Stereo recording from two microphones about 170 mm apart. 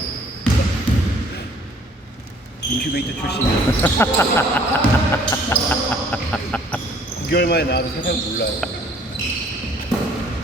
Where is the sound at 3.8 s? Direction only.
15° left (ahead or behind).